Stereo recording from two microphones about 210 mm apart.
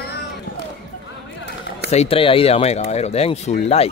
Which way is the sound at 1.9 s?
30° left (ahead or behind).